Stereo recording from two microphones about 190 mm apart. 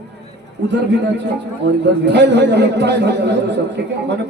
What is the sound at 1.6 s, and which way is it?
A man's voice, 65° right (ahead or behind).